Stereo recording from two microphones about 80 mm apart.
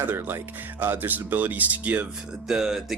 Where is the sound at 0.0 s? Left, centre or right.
Right.